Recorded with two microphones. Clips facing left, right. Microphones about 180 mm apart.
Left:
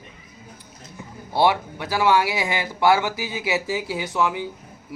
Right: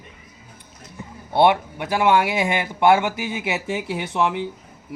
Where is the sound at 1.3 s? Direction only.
25° right (ahead or behind).